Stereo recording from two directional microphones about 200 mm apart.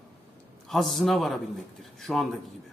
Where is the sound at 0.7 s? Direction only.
Centre (ahead or behind).